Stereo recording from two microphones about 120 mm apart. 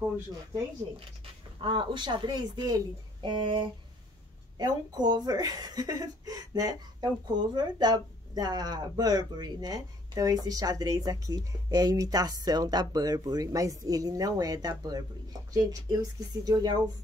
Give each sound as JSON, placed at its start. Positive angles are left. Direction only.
{"t": 1.6, "sound": "a woman's voice", "side_deg": -45}